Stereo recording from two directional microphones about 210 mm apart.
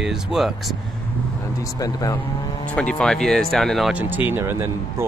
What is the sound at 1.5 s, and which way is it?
Speech, 15° left (ahead or behind).